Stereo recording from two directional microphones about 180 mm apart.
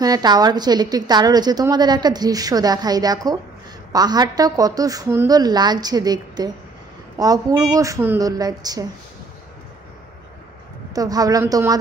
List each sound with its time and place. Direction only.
0.0 s a woman's voice: 20° right (ahead or behind)
11.0 s a woman's voice: 20° right (ahead or behind)